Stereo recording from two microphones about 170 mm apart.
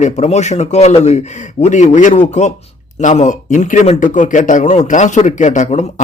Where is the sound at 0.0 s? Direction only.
40° left (ahead or behind).